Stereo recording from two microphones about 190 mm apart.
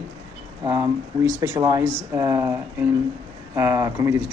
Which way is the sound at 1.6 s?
20° right (ahead or behind).